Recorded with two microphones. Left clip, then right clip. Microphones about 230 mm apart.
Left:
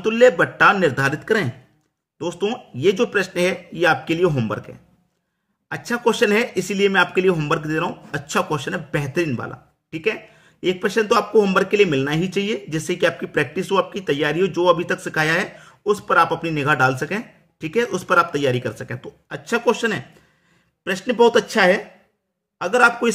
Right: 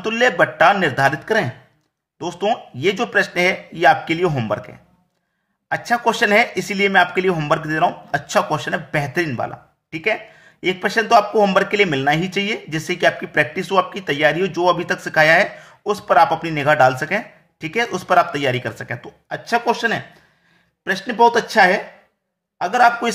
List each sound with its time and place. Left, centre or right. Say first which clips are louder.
0.0 s speech: left 1 dB; centre